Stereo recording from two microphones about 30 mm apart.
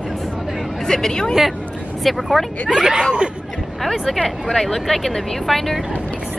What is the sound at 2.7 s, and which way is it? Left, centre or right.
Speech, right.